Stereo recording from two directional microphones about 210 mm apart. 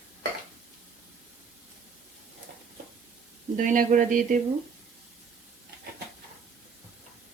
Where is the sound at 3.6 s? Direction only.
40° right (ahead or behind).